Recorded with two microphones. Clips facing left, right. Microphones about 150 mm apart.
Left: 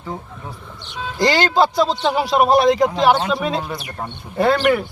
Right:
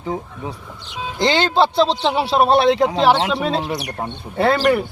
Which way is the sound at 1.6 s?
30° right (ahead or behind).